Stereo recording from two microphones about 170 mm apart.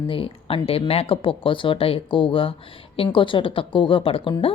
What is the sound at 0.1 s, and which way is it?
Speech, 30° left (ahead or behind).